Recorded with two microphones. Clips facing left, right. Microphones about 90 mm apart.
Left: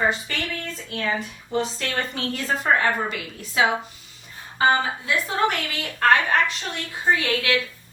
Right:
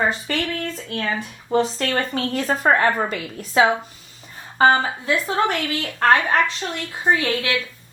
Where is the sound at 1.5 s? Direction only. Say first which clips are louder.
Right 5 dB; 40° right (ahead or behind).